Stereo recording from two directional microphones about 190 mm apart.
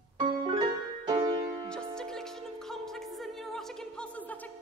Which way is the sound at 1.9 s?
5° left (ahead or behind).